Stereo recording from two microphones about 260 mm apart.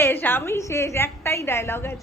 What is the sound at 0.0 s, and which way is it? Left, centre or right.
Speech, centre.